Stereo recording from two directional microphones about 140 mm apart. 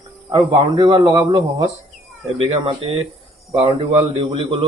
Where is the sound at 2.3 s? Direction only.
45° right (ahead or behind).